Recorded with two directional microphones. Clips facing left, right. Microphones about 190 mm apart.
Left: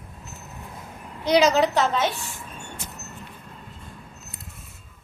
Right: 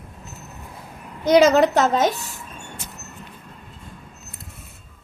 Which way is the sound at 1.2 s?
50° right (ahead or behind).